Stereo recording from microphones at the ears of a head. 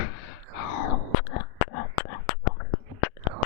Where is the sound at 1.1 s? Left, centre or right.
Left.